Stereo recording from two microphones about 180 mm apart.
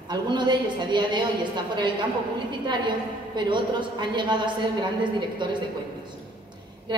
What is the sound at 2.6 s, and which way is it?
A woman's voice, 25° right (ahead or behind).